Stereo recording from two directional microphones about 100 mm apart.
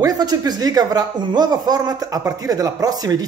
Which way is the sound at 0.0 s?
40° right (ahead or behind).